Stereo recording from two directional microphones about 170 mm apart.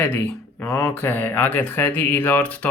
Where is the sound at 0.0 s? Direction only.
10° left (ahead or behind).